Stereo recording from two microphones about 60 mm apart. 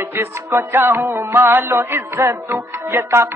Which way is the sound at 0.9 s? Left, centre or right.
Right.